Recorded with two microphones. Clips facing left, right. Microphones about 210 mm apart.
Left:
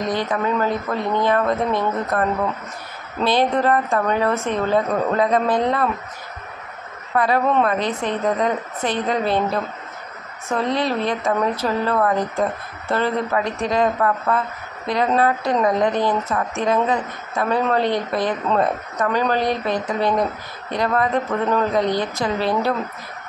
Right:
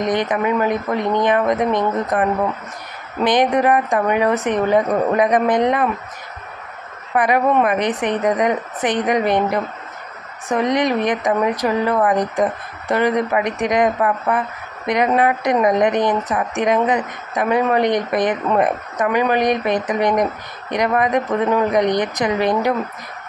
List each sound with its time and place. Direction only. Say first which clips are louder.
0.0 s a woman's voice: right 3 dB; 20° right (ahead or behind)
7.2 s a woman's voice: right 2 dB; 15° right (ahead or behind)